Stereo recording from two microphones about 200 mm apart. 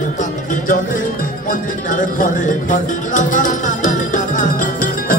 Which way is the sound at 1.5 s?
40° left (ahead or behind).